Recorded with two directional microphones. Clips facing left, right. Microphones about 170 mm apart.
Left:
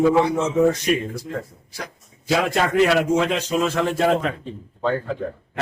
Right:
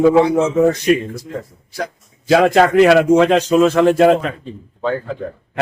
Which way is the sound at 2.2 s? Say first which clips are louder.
Right 9 dB; 90° right.